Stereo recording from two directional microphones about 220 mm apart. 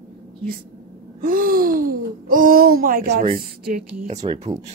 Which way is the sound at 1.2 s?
40° right (ahead or behind).